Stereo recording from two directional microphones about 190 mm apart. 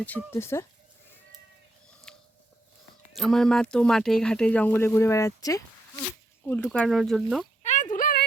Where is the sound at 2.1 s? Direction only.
5° left (ahead or behind).